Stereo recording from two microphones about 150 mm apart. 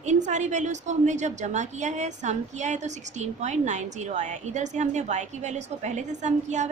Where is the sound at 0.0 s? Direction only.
50° right (ahead or behind).